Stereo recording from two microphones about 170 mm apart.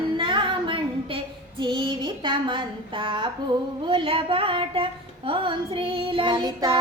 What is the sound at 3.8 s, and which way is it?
A woman's voice, 30° right (ahead or behind).